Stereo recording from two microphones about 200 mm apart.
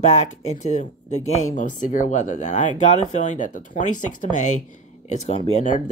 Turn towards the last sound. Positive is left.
turn(degrees=40)  # may be behind; listen again after turning